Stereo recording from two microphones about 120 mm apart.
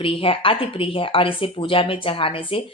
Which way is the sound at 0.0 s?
50° left (ahead or behind).